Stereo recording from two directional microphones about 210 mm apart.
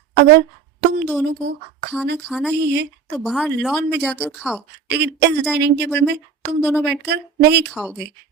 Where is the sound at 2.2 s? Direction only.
5° left (ahead or behind).